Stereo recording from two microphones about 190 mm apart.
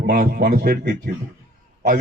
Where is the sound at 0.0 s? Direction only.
55° right (ahead or behind).